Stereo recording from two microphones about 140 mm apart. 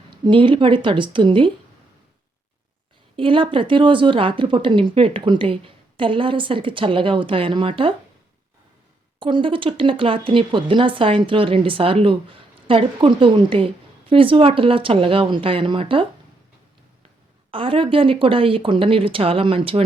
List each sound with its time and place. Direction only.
0.3 s speech: 35° right (ahead or behind)
3.2 s speech: 40° right (ahead or behind)
9.1 s speech: 35° right (ahead or behind)
17.5 s speech: 40° right (ahead or behind)